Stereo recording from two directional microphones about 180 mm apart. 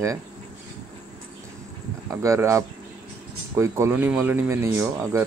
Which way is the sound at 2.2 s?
15° right (ahead or behind).